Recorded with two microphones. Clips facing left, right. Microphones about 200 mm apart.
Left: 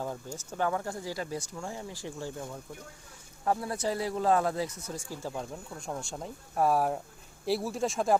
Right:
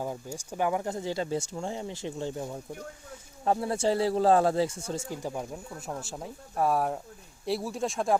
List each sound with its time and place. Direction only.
0.0 s speech: 10° right (ahead or behind)